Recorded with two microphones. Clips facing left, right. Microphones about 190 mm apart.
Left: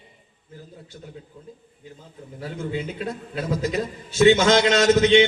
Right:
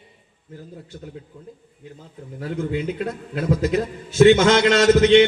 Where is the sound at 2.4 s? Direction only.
55° right (ahead or behind).